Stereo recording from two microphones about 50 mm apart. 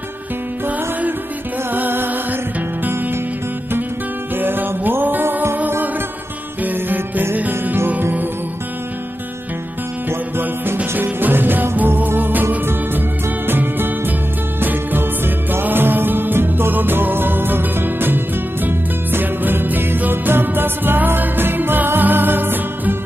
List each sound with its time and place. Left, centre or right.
1.7 s music: right
4.4 s music: right
6.6 s music: right
10.0 s music: right